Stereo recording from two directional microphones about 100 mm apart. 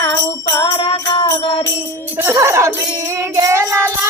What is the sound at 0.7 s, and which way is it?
Music, 55° left (ahead or behind).